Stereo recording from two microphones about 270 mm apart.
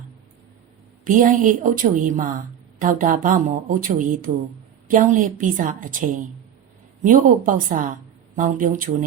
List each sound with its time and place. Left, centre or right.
1.0 s a woman's voice: right